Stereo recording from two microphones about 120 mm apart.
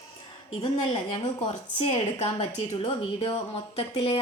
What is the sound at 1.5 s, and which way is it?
A woman's voice, 60° left (ahead or behind).